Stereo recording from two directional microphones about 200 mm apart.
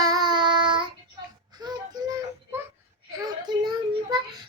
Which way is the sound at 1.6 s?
20° right (ahead or behind).